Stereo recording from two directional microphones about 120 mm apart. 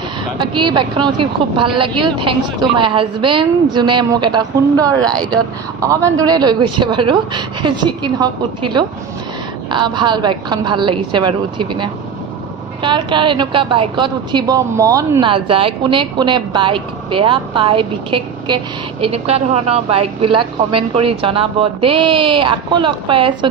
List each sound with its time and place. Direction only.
0.4 s a man's voice: 40° right (ahead or behind)
14.8 s speech: 30° right (ahead or behind)
15.2 s a woman's voice: 50° right (ahead or behind)